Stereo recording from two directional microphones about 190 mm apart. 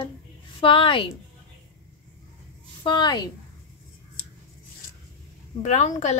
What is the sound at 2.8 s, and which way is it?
Speech, 20° left (ahead or behind).